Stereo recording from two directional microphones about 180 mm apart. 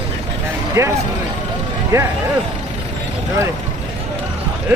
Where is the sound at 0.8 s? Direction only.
15° right (ahead or behind).